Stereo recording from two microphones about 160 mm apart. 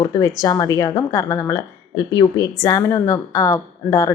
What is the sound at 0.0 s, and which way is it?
A woman's voice, 20° left (ahead or behind).